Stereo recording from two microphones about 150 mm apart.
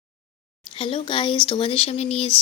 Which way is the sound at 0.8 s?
35° left (ahead or behind).